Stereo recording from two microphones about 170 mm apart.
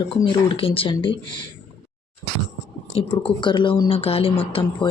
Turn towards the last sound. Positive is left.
turn(degrees=35)  # may be behind; listen again after turning